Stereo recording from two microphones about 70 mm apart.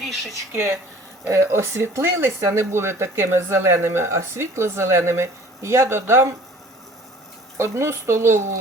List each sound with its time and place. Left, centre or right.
0.5 s speech: right
7.6 s speech: right